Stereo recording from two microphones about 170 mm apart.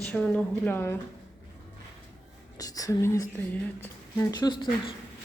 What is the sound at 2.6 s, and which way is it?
Speech, 20° left (ahead or behind).